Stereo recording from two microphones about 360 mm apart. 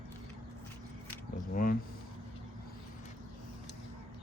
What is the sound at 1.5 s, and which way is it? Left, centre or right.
Speech, left.